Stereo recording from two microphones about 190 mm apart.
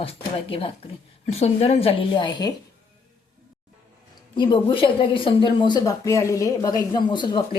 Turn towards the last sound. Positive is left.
turn(degrees=25)  # may be behind; listen again after turning